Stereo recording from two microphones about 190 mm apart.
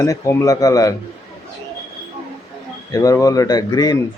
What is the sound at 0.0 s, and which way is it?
Speech, 15° left (ahead or behind).